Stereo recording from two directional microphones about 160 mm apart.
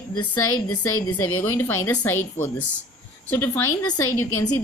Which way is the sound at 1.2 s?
15° left (ahead or behind).